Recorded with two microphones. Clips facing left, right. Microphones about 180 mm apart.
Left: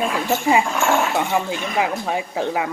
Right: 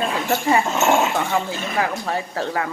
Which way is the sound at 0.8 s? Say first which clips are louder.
Right 1 dB; 20° right (ahead or behind).